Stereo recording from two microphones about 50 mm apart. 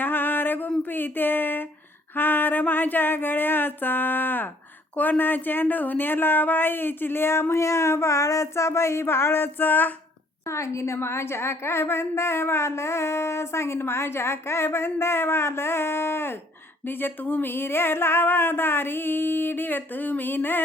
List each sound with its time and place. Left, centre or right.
0.0 s a sound: left
4.9 s speech: left
10.4 s a woman's voice: left